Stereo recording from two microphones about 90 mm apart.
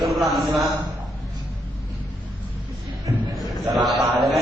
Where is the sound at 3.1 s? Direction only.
40° right (ahead or behind).